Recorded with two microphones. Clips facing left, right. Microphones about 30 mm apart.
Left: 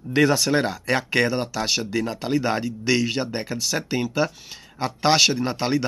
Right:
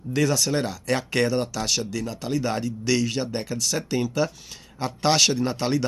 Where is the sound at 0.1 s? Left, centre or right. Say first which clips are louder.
Left 4 dB; left.